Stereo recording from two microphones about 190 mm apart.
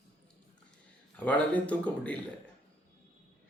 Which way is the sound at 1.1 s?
5° left (ahead or behind).